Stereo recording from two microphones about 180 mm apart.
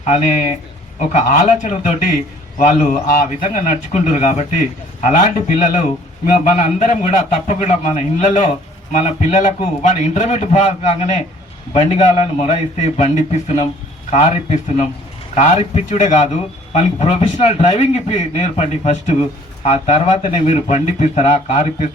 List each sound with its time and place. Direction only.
0.0 s a man's voice: 40° left (ahead or behind)